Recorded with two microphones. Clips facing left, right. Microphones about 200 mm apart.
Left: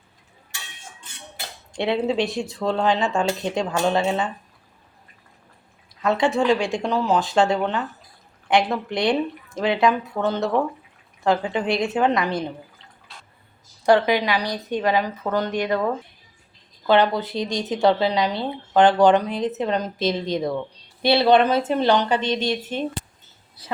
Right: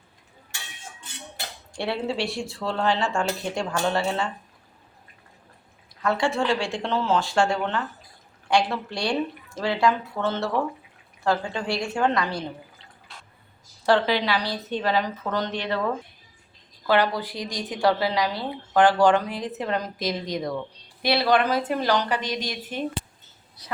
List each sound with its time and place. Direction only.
1.7 s a woman's voice: 20° left (ahead or behind)
6.0 s a woman's voice: 20° left (ahead or behind)
13.8 s a woman's voice: 15° left (ahead or behind)